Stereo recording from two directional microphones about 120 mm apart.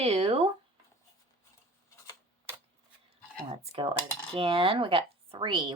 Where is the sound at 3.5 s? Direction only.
55° right (ahead or behind).